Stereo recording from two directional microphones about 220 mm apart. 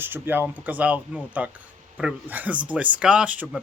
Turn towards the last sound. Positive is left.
turn(degrees=0)  # may be behind; listen again after turning